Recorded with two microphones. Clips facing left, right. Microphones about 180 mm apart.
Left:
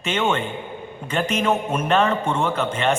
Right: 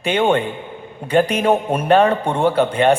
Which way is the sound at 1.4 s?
35° right (ahead or behind).